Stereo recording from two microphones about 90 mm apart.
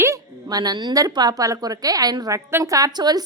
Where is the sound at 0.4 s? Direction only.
45° right (ahead or behind).